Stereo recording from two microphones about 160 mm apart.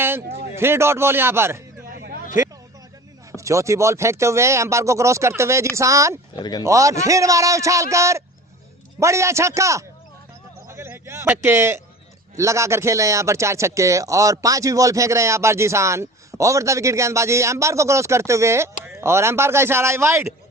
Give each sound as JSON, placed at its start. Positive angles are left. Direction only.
{"t": 0.5, "sound": "speech", "side_deg": -15}
{"t": 3.3, "sound": "a man's voice", "side_deg": -20}
{"t": 6.4, "sound": "speech", "side_deg": 25}
{"t": 6.7, "sound": "a man's voice", "side_deg": -20}